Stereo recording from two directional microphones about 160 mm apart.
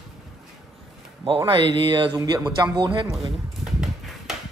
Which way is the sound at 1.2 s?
35° right (ahead or behind).